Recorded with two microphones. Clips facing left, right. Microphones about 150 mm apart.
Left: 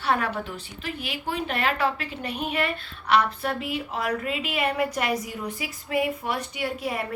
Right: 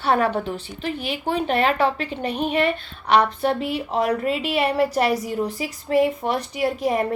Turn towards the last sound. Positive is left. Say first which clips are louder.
# right 7 dB
turn(degrees=-40)  # may be behind; listen again after turning